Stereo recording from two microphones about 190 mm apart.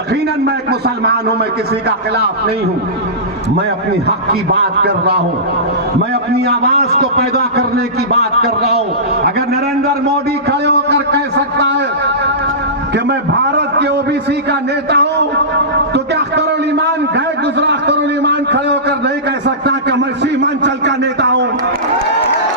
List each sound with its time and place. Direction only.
0.4 s a man's voice: 60° right (ahead or behind)
4.8 s a man's voice: 60° right (ahead or behind)
6.3 s a man's voice: 55° right (ahead or behind)
10.7 s a man's voice: 65° right (ahead or behind)
13.1 s a man's voice: 65° right (ahead or behind)
14.8 s a man's voice: 60° right (ahead or behind)
16.1 s a sound: 60° right (ahead or behind)